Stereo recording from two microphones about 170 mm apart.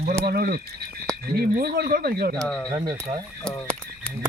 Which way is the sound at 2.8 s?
25° right (ahead or behind).